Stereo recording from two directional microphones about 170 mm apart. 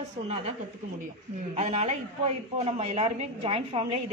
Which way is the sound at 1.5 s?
40° right (ahead or behind).